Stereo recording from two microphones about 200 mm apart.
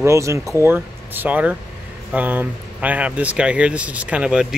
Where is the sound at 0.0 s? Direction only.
15° right (ahead or behind).